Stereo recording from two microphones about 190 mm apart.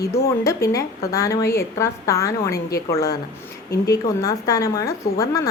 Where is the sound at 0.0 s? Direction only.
15° left (ahead or behind).